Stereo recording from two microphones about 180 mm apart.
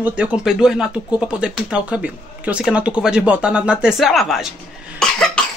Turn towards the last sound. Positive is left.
turn(degrees=5)  # may be behind; listen again after turning